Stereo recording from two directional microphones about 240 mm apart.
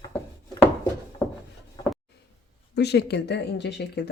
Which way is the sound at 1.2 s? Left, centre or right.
Centre.